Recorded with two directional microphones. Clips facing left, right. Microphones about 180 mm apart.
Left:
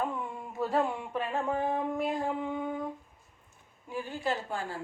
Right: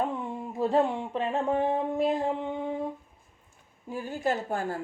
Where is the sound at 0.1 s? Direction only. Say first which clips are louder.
Right 4 dB; 30° right (ahead or behind).